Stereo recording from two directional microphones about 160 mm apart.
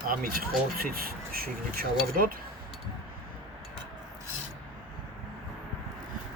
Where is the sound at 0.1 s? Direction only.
65° right (ahead or behind).